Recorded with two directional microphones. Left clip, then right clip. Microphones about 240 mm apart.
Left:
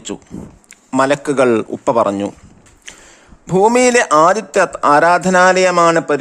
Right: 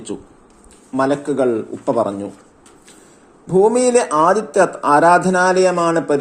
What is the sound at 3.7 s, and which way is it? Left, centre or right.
Speech, left.